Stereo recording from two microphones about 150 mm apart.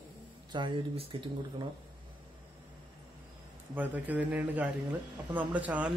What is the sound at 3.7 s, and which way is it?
A man's voice, 10° right (ahead or behind).